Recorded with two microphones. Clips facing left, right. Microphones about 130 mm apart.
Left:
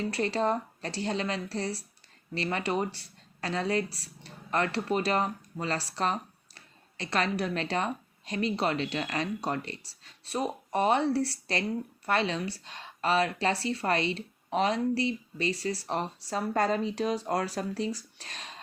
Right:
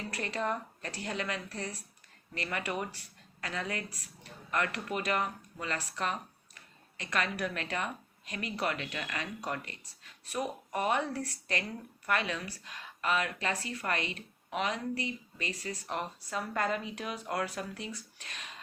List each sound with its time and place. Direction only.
0.1 s speech: 30° left (ahead or behind)